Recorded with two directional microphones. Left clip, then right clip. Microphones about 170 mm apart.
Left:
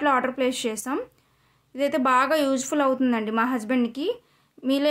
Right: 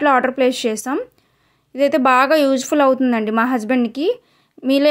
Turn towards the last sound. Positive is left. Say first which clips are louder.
# right 8 dB
turn(degrees=-35)  # may be behind; listen again after turning